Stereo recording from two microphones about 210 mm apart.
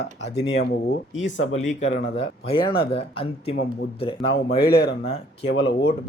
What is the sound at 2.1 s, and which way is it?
Speech, 25° left (ahead or behind).